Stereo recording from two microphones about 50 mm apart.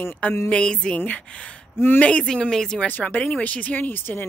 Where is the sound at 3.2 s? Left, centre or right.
Left.